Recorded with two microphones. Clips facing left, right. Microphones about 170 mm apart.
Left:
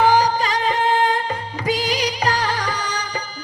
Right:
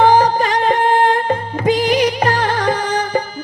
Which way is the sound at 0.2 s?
55° right (ahead or behind).